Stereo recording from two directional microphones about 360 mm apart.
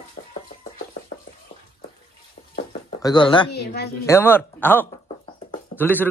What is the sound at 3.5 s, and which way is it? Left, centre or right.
Speech, left.